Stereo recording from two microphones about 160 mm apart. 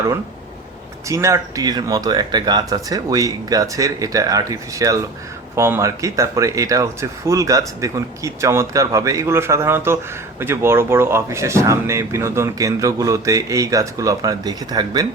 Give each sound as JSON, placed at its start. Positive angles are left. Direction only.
{"t": 1.0, "sound": "speech", "side_deg": -20}